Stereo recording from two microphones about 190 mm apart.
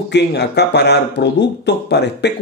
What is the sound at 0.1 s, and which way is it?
Speech, 60° left (ahead or behind).